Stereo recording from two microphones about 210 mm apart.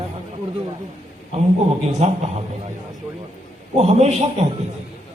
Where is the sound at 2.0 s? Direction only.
30° right (ahead or behind).